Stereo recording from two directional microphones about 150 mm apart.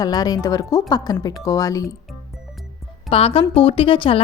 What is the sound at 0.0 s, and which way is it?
A woman's voice, 25° left (ahead or behind).